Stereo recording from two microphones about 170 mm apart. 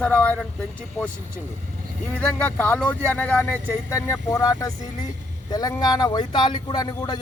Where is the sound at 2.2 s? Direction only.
10° left (ahead or behind).